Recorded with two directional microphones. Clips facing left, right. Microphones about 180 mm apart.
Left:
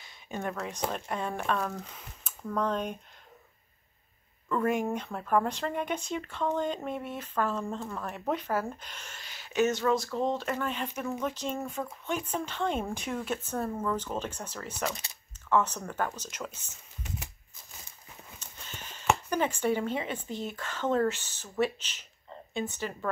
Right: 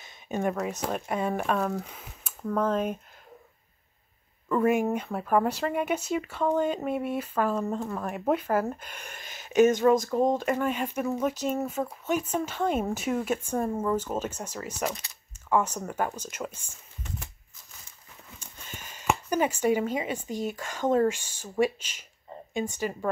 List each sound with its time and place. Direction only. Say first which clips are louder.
0.0 s speech: right 7 dB; 20° right (ahead or behind)
4.5 s speech: right 4 dB; 10° right (ahead or behind)
9.1 s a sound: right 4 dB; 45° right (ahead or behind)
9.6 s speech: right 6 dB; 50° right (ahead or behind)
10.4 s speech: right 5 dB; 10° right (ahead or behind)
18.4 s speech: right 3 dB; 10° right (ahead or behind)